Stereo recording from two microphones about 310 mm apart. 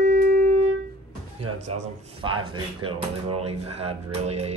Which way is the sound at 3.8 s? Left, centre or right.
Centre.